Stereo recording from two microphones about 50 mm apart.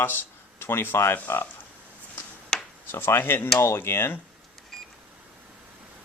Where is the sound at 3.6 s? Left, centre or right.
Left.